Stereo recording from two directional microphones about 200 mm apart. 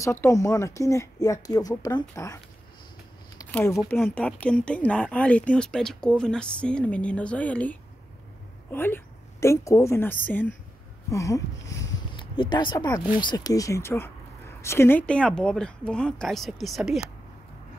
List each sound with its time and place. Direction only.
0.0 s speech: 15° left (ahead or behind)
8.7 s a woman's voice: 10° left (ahead or behind)